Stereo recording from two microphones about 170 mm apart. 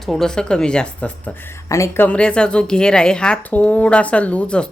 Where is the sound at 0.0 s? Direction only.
Centre (ahead or behind).